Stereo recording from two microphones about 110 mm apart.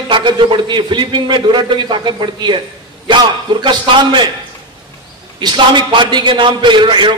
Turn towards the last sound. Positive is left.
turn(degrees=-45)  # may be behind; listen again after turning